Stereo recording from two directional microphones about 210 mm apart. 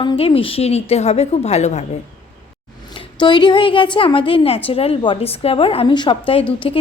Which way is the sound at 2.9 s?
20° left (ahead or behind).